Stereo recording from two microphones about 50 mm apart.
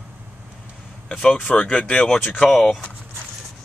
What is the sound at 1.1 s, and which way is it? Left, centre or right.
Speech, centre.